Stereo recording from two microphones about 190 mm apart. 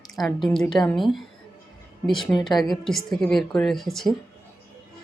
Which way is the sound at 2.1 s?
Centre (ahead or behind).